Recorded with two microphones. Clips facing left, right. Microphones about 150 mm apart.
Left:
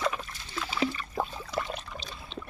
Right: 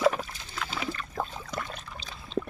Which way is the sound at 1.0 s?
5° left (ahead or behind).